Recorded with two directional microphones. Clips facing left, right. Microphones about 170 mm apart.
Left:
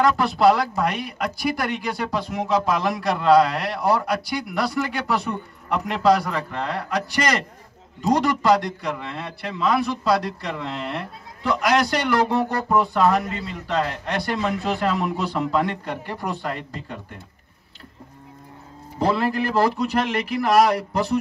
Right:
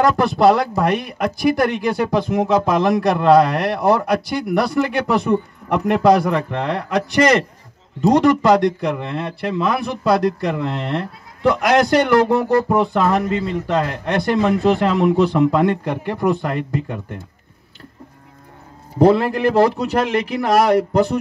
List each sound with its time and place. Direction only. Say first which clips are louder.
0.0 s a man's voice: right 3 dB; 45° right (ahead or behind)
18.9 s a man's voice: right 7 dB; 45° right (ahead or behind)